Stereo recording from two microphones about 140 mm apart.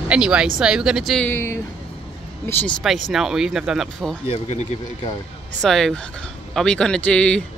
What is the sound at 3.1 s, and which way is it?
Speech, 5° right (ahead or behind).